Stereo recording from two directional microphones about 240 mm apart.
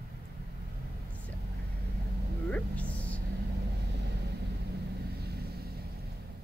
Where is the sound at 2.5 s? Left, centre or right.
Centre.